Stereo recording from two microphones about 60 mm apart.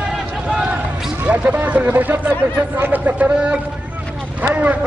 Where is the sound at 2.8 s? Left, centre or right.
Right.